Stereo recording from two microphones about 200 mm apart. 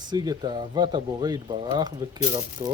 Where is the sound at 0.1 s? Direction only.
20° right (ahead or behind).